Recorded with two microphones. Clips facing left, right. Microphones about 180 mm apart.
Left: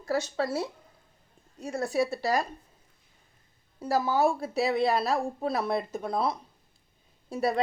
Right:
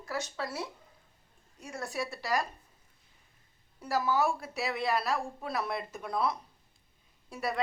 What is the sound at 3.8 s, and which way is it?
Speech, 30° left (ahead or behind).